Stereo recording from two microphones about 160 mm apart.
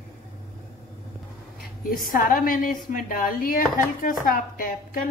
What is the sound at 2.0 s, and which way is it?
A woman's voice, 60° left (ahead or behind).